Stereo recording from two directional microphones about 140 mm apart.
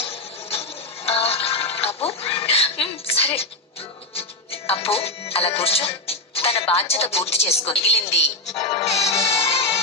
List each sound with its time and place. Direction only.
1.0 s music: 45° left (ahead or behind)
4.1 s speech: 45° left (ahead or behind)